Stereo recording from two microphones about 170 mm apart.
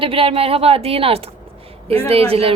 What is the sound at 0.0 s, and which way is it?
Speech, 35° right (ahead or behind).